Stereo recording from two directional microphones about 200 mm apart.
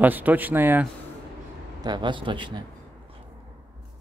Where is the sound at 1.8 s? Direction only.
20° right (ahead or behind).